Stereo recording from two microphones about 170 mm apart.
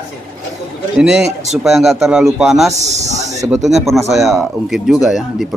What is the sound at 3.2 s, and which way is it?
Snake, 20° right (ahead or behind).